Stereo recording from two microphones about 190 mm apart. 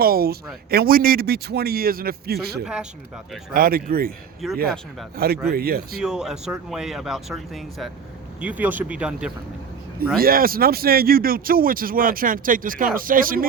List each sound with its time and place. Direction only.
0.0 s speech: 50° right (ahead or behind)
4.4 s speech: centre (ahead or behind)
5.1 s speech: 55° right (ahead or behind)
6.0 s speech: 5° right (ahead or behind)
10.2 s speech: 50° right (ahead or behind)